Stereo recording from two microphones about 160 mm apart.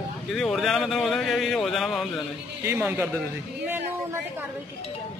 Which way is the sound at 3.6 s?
10° right (ahead or behind).